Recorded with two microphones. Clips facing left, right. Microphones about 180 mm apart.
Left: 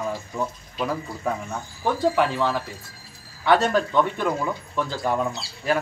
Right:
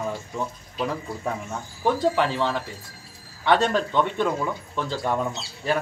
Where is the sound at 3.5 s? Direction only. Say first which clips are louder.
Left 1 dB; 5° left (ahead or behind).